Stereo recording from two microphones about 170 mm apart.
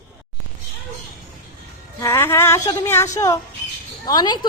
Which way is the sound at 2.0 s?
15° left (ahead or behind).